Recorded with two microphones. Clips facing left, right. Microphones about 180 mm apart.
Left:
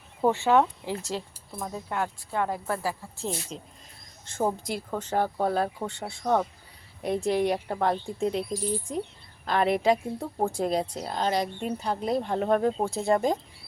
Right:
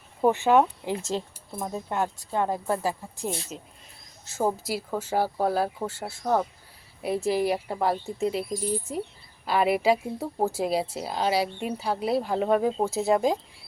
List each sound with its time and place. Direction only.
0.3 s speech: 15° right (ahead or behind)
3.5 s a woman's voice: 5° right (ahead or behind)
9.5 s a woman's voice: 5° right (ahead or behind)